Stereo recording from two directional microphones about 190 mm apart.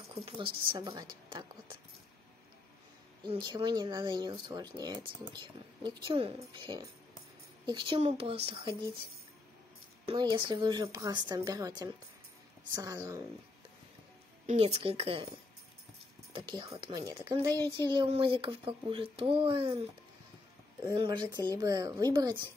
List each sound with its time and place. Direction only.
0.2 s a woman's voice: 25° right (ahead or behind)
3.3 s speech: 25° right (ahead or behind)
10.0 s speech: 25° right (ahead or behind)
14.4 s a woman's voice: 35° right (ahead or behind)
16.3 s speech: 25° right (ahead or behind)
17.5 s speech: 15° left (ahead or behind)
17.8 s speech: 25° right (ahead or behind)
20.8 s speech: 25° right (ahead or behind)